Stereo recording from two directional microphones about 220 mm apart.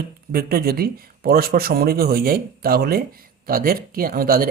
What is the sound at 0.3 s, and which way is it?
Speech, 40° right (ahead or behind).